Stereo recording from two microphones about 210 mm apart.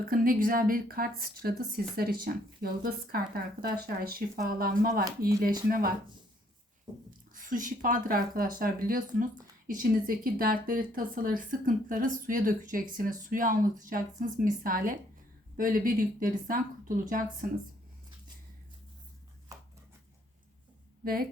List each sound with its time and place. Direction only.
0.0 s a woman's voice: 45° right (ahead or behind)
7.3 s a woman's voice: 40° right (ahead or behind)
21.0 s speech: 45° right (ahead or behind)